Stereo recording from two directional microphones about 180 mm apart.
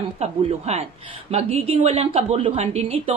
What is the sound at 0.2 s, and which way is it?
A woman's voice, 35° right (ahead or behind).